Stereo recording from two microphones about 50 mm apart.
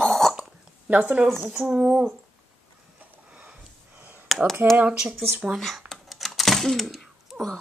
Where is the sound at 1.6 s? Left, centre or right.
Centre.